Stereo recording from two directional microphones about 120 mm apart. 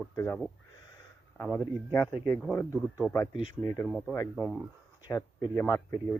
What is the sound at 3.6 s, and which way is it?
Speech, 30° left (ahead or behind).